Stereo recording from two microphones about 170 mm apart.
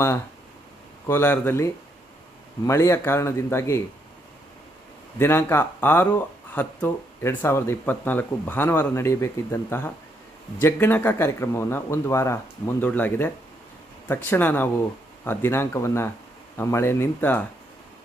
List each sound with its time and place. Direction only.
1.0 s speech: 10° left (ahead or behind)
5.2 s speech: 15° left (ahead or behind)